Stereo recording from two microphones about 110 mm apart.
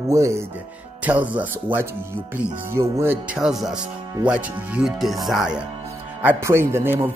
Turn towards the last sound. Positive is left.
turn(degrees=-20)  # may be behind; listen again after turning